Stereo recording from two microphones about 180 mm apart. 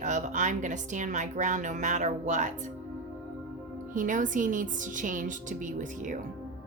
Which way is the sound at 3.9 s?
45° right (ahead or behind).